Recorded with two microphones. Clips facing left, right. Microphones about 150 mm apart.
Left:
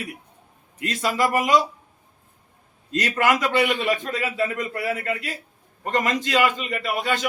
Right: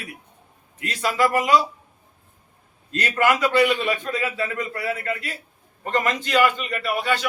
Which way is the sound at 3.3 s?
15° left (ahead or behind).